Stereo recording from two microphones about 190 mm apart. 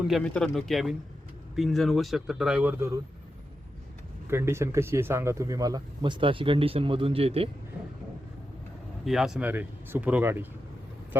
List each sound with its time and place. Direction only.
0.0 s speech: centre (ahead or behind); by 3.0 s 15° right (ahead or behind)
4.3 s speech: 15° right (ahead or behind); by 7.5 s 30° right (ahead or behind)
9.0 s speech: centre (ahead or behind)